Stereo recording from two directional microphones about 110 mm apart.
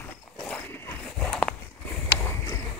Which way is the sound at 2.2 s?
25° left (ahead or behind).